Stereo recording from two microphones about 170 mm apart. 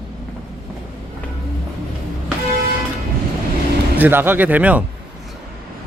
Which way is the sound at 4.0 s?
10° right (ahead or behind).